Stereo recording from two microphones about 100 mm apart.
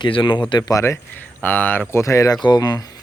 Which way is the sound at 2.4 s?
45° left (ahead or behind).